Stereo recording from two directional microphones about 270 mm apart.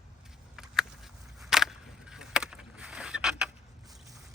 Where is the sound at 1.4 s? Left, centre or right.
Centre.